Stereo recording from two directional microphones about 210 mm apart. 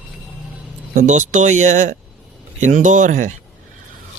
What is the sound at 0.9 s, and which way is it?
Speech, 35° right (ahead or behind).